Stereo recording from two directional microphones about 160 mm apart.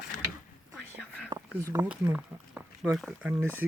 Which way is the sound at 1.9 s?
10° right (ahead or behind).